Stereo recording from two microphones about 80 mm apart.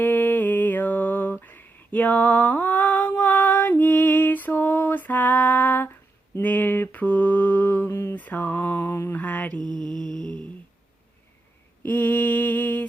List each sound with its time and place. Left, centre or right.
0.0 s mantra: left
8.1 s mantra: left
9.2 s mantra: centre
9.6 s mantra: right
11.8 s a sound: left